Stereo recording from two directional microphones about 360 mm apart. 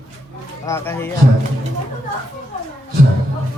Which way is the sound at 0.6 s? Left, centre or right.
Centre.